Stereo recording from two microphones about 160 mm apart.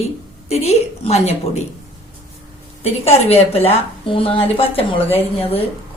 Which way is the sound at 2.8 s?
40° left (ahead or behind).